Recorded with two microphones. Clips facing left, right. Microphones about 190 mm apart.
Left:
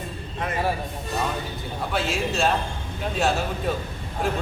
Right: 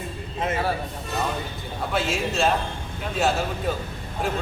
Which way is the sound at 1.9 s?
Centre (ahead or behind).